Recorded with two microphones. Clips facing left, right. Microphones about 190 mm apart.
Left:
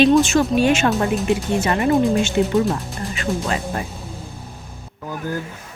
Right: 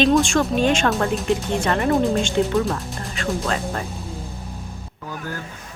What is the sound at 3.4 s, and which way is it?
Speech, 10° left (ahead or behind).